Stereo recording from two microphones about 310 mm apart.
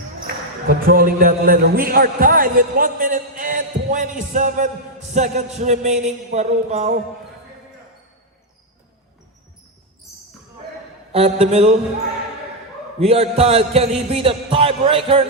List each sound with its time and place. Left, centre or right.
0.7 s a man's voice: right
11.1 s a man's voice: centre
13.0 s a sound: centre